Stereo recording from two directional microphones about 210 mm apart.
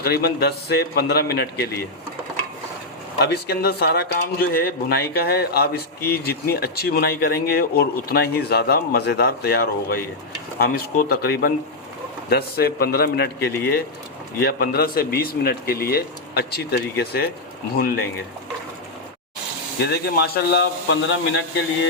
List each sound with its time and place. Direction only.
0.0 s speech: 50° left (ahead or behind)
3.2 s speech: 50° left (ahead or behind)
19.8 s speech: 50° left (ahead or behind)